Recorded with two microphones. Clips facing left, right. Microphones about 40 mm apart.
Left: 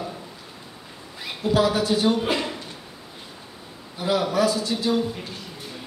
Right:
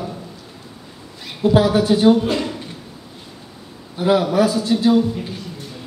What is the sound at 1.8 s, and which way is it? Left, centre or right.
Speech, centre.